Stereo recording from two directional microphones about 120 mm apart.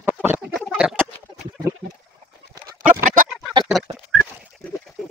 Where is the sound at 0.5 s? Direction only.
5° right (ahead or behind).